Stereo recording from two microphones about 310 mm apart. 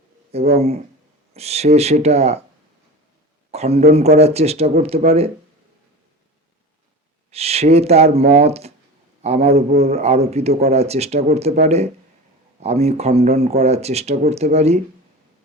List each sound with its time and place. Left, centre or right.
0.3 s a man's voice: right
3.5 s a man's voice: right
7.3 s a man's voice: centre